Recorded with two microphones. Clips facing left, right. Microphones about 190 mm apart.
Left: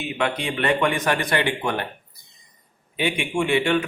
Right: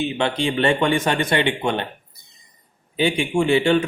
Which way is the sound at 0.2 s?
30° right (ahead or behind).